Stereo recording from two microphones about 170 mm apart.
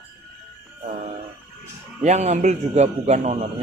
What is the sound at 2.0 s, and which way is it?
Speech, 45° right (ahead or behind).